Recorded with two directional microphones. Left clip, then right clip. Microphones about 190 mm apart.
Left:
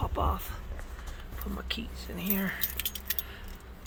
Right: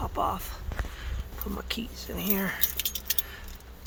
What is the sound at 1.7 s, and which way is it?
Speech, 15° right (ahead or behind).